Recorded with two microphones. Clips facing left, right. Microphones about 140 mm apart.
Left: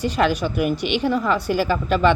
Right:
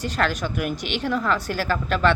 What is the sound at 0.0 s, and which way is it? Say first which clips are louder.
A woman's voice: left 5 dB; 10° left (ahead or behind).